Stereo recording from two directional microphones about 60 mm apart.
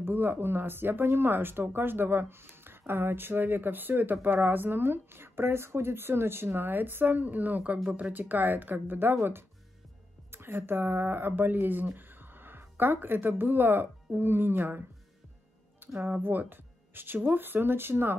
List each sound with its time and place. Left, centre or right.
0.0 s speech: right
16.0 s speech: right